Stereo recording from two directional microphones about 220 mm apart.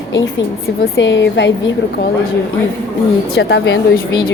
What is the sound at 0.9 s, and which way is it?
Speech, 55° left (ahead or behind).